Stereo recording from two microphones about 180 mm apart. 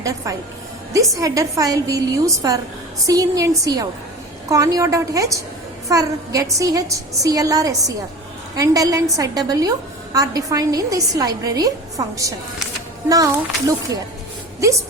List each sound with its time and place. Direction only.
0.0 s a woman's voice: 20° right (ahead or behind)